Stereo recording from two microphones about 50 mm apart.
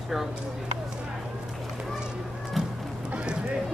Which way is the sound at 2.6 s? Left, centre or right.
Centre.